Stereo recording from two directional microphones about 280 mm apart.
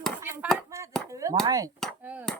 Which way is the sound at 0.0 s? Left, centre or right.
Centre.